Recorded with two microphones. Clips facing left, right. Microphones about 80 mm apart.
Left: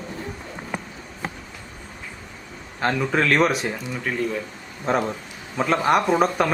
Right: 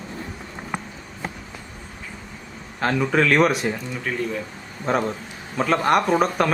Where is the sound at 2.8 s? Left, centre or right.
Centre.